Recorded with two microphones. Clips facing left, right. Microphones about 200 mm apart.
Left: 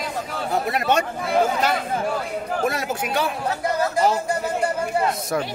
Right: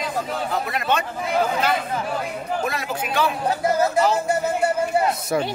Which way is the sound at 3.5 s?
25° right (ahead or behind).